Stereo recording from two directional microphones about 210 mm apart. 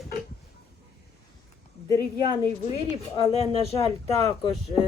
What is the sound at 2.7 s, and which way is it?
Speech, 25° left (ahead or behind).